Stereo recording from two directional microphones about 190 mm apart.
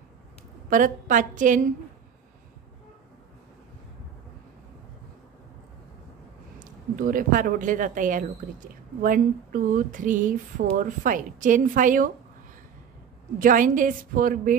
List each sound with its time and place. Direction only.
0.7 s speech: 45° right (ahead or behind)
6.6 s speech: 45° right (ahead or behind)
13.4 s speech: 45° right (ahead or behind)